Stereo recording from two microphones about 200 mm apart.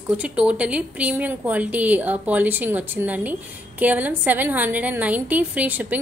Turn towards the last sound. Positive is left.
turn(degrees=-10)  # may be behind; listen again after turning